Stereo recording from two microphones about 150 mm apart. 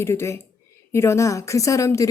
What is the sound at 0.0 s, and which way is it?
A woman's voice, 15° left (ahead or behind).